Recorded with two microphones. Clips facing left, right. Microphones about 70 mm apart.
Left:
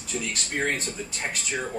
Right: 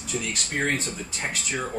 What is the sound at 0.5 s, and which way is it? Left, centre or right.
Speech, centre.